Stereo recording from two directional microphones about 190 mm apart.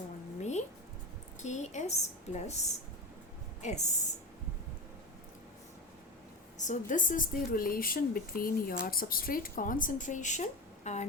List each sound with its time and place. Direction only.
1.4 s a woman's voice: 40° left (ahead or behind)
6.6 s speech: 40° left (ahead or behind)